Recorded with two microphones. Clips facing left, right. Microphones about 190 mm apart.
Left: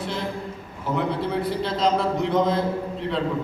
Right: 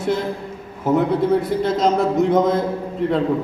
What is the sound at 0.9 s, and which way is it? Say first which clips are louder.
A man's voice: right 7 dB; 45° right (ahead or behind).